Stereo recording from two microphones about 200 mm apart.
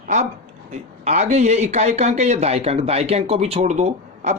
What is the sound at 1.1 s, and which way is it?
Speech, 35° right (ahead or behind).